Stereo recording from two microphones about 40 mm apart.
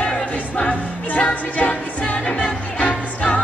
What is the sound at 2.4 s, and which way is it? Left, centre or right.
Music, left.